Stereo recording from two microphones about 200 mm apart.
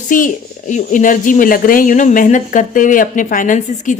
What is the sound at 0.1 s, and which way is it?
Speech, 40° left (ahead or behind).